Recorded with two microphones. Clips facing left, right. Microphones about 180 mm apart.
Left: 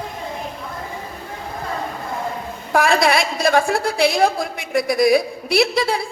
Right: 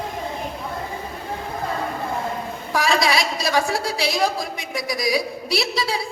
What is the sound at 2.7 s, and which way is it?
A woman's voice, 55° left (ahead or behind).